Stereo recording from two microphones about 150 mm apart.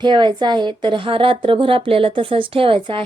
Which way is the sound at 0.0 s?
30° right (ahead or behind).